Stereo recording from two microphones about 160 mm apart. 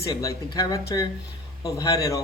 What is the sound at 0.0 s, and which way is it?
A man's voice, 20° left (ahead or behind).